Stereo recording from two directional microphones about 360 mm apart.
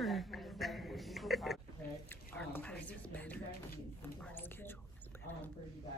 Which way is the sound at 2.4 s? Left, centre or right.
Centre.